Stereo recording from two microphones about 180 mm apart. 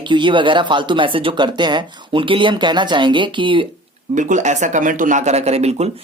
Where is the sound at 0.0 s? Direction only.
25° right (ahead or behind).